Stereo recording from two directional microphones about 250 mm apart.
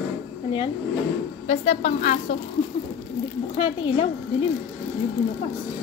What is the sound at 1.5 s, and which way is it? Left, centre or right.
Speech, left.